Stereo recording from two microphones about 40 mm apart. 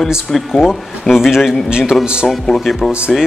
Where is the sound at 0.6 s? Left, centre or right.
Centre.